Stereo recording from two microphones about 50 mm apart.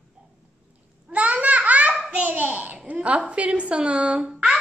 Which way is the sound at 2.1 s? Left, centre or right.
Right.